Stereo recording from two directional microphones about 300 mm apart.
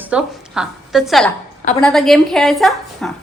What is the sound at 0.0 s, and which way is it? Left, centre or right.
A woman's voice, centre.